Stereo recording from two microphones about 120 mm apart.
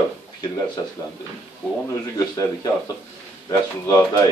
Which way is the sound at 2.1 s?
30° left (ahead or behind).